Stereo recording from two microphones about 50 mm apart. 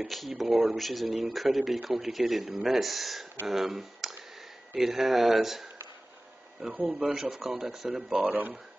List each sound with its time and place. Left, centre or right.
0.0 s speech: centre
6.9 s speech: centre
8.3 s speech: right